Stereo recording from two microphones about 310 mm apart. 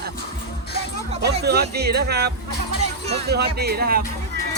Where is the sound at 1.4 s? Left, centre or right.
Right.